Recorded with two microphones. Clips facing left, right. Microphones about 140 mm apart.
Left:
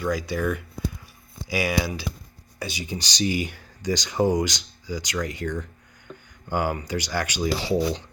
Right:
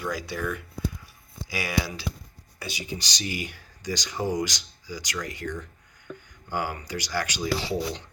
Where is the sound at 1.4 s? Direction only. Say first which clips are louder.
Left 4 dB; 15° left (ahead or behind).